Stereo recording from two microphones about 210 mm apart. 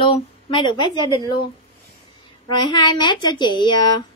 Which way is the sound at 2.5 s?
20° left (ahead or behind).